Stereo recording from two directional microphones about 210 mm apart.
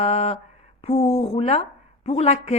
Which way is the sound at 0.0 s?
30° left (ahead or behind).